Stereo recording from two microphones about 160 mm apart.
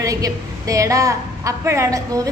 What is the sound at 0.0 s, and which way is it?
A woman's voice, 20° right (ahead or behind).